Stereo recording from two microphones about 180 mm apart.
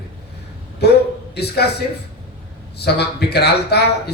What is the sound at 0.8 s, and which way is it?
Speech, 65° left (ahead or behind).